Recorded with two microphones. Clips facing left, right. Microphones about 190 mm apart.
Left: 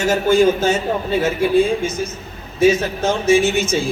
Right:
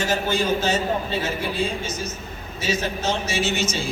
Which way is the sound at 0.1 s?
50° left (ahead or behind).